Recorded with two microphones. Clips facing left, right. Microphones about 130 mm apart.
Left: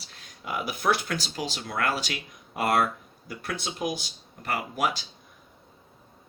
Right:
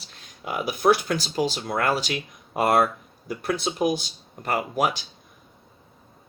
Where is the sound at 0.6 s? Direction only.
30° right (ahead or behind).